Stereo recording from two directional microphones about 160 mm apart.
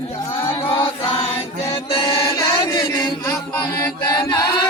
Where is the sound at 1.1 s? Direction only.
35° left (ahead or behind).